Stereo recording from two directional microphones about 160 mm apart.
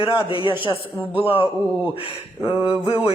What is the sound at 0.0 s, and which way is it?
Speech, 30° left (ahead or behind).